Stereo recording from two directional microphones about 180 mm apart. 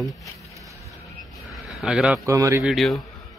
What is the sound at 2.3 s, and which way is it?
Speech, 15° right (ahead or behind).